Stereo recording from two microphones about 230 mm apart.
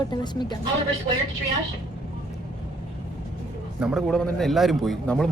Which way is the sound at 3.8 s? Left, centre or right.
Centre.